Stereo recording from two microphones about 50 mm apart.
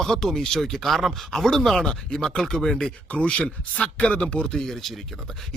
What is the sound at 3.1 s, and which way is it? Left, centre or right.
Speech, left.